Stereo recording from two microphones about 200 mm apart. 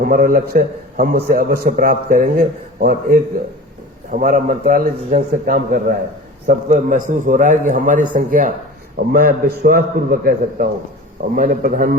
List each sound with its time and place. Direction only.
0.0 s a man's voice: 45° right (ahead or behind)